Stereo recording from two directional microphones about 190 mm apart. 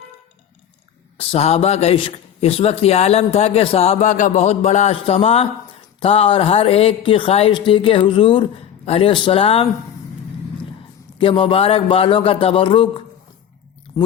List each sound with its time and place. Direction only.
1.2 s speech: 30° left (ahead or behind)
11.2 s speech: 30° left (ahead or behind)